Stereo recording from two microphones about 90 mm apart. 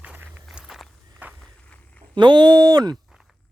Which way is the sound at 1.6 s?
15° left (ahead or behind).